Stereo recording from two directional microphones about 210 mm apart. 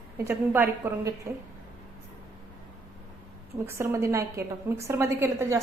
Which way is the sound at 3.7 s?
15° right (ahead or behind).